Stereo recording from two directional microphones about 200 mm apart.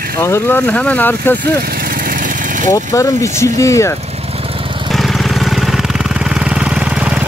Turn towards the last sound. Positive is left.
turn(degrees=-5)  # may be behind; listen again after turning